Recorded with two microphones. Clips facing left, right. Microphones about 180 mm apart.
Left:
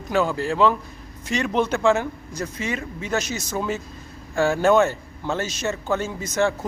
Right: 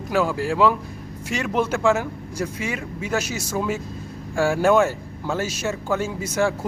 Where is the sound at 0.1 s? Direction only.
5° right (ahead or behind).